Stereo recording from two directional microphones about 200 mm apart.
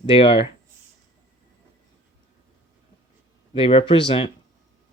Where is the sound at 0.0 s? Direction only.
25° left (ahead or behind).